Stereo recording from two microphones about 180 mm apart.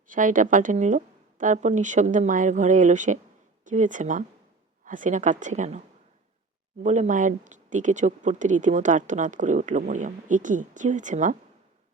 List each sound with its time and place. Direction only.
0.1 s speech: 45° right (ahead or behind)
6.8 s speech: 40° right (ahead or behind)